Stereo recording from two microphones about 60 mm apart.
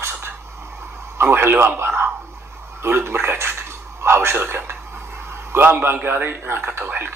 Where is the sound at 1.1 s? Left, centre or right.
Right.